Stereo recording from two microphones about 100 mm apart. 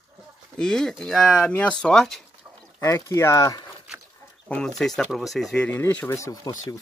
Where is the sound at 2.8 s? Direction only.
30° left (ahead or behind).